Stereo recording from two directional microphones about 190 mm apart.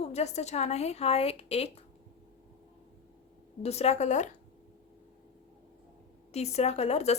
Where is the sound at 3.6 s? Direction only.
35° left (ahead or behind).